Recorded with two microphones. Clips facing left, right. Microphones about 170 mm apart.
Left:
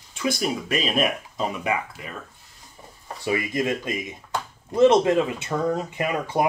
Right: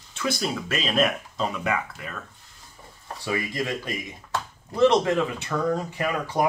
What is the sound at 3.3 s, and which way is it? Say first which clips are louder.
Speech: left 4 dB; 20° left (ahead or behind).